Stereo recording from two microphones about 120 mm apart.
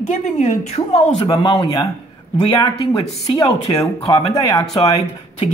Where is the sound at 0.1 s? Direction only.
80° left.